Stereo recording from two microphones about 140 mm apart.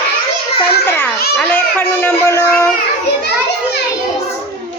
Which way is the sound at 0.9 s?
15° left (ahead or behind).